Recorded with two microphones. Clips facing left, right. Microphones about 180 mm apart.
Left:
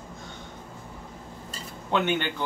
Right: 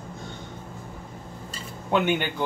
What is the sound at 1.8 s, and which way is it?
Speech, 10° right (ahead or behind).